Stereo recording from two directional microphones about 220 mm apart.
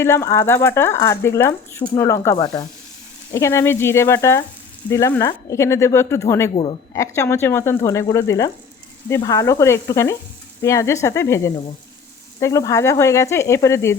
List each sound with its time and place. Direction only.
0.0 s speech: 10° left (ahead or behind)
6.5 s speech: 25° left (ahead or behind)
6.9 s speech: 15° left (ahead or behind)